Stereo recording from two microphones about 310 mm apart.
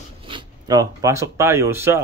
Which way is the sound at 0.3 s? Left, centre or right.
Centre.